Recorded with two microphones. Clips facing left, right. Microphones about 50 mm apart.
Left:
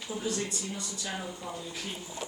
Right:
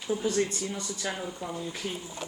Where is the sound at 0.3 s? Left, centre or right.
Right.